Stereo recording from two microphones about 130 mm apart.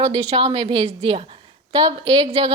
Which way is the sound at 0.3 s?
50° right (ahead or behind).